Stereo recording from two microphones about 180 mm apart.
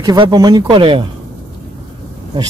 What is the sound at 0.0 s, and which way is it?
Speech, 25° right (ahead or behind).